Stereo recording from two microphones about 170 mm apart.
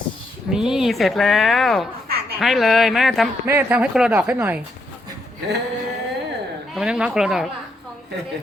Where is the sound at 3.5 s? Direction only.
10° right (ahead or behind).